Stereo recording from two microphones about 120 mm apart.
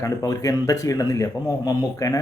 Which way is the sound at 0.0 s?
30° left (ahead or behind).